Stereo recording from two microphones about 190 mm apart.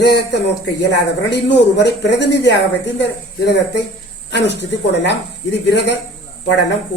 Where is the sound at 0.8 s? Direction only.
65° left (ahead or behind).